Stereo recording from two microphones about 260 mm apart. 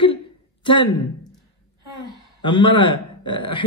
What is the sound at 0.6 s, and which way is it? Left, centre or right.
Speech, centre.